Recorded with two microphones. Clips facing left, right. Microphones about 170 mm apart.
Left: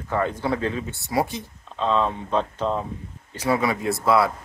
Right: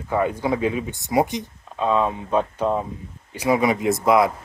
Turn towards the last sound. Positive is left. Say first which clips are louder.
# right 3 dB
turn(degrees=-15)  # may be behind; listen again after turning